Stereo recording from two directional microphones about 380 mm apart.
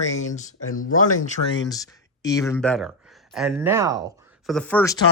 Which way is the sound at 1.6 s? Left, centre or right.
Centre.